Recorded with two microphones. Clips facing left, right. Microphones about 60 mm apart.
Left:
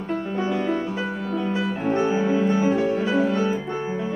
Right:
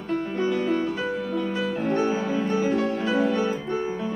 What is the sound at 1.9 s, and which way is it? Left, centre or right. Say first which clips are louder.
Music: left 4 dB; left.